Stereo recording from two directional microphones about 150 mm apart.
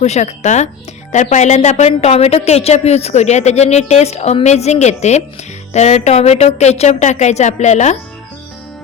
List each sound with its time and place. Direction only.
0.0 s a woman's voice: 50° left (ahead or behind)